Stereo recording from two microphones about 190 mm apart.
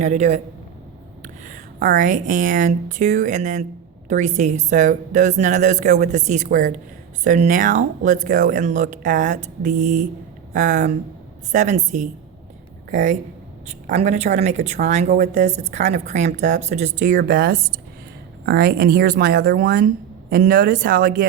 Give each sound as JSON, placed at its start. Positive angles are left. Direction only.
{"t": 0.0, "sound": "a woman's voice", "side_deg": -40}
{"t": 17.2, "sound": "speech", "side_deg": -50}